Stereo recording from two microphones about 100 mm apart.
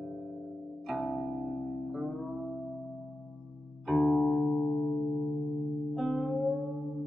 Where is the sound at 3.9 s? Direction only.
Centre (ahead or behind).